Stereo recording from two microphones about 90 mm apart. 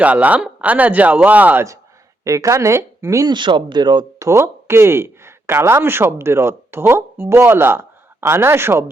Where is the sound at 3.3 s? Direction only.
60° right (ahead or behind).